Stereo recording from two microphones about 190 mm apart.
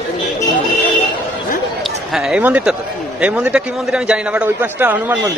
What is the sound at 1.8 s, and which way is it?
A man's voice, centre (ahead or behind).